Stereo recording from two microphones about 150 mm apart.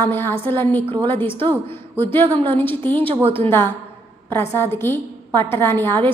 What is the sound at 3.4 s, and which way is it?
A woman's voice, 15° left (ahead or behind).